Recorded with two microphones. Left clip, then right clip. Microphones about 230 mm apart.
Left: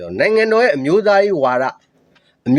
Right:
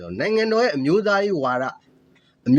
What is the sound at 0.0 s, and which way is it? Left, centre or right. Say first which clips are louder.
A man's voice: left 7 dB; centre.